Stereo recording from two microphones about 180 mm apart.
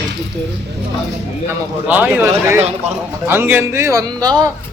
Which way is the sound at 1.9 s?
10° right (ahead or behind).